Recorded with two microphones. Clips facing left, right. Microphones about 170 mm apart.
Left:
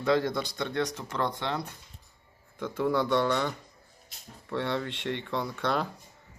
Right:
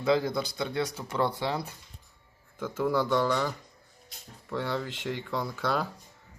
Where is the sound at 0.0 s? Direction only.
Centre (ahead or behind).